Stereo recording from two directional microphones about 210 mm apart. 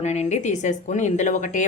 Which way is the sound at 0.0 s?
30° left (ahead or behind).